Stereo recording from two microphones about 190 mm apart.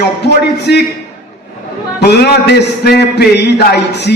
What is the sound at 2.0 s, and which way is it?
A man's voice, 60° left (ahead or behind).